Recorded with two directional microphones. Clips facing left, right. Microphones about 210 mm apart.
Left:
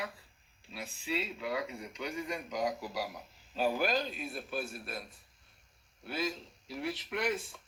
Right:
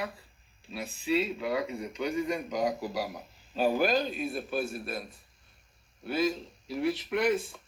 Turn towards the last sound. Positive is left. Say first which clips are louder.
# right 7 dB
turn(degrees=-50)  # may be behind; listen again after turning